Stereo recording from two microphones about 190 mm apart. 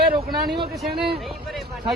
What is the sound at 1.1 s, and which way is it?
Speech, centre (ahead or behind).